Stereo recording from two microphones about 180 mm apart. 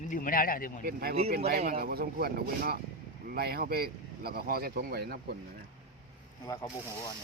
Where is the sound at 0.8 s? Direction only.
55° right (ahead or behind).